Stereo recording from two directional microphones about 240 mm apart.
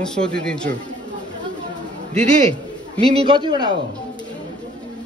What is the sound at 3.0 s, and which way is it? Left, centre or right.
Speech, right.